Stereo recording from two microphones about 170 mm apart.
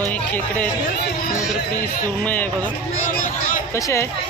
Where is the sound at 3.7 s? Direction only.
15° left (ahead or behind).